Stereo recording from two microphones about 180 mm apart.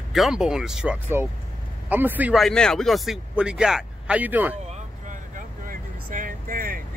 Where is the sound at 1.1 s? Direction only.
15° right (ahead or behind).